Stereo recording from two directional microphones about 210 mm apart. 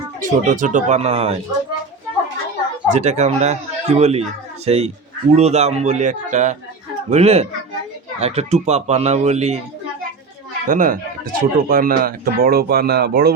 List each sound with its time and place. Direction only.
0.2 s speech: 40° right (ahead or behind)
2.9 s speech: 35° right (ahead or behind)
10.7 s speech: 40° right (ahead or behind)